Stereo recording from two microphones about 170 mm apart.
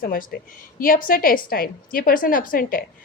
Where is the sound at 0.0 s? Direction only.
55° left (ahead or behind).